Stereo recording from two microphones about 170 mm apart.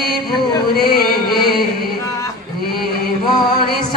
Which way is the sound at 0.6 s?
65° left (ahead or behind).